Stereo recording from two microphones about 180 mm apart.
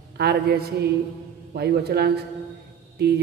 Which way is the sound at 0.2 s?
60° right (ahead or behind).